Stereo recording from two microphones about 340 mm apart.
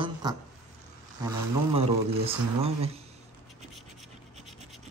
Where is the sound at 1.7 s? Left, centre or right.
Centre.